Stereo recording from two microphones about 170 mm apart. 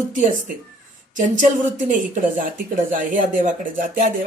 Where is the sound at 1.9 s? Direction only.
50° right (ahead or behind).